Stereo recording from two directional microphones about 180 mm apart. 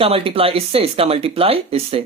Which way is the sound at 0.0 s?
30° right (ahead or behind).